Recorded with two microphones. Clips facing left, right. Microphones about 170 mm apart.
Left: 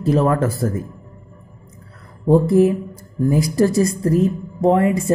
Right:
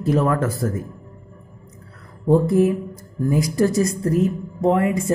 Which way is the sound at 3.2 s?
35° left (ahead or behind).